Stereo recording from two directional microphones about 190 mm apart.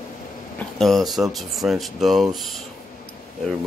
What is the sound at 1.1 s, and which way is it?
Speech, centre (ahead or behind).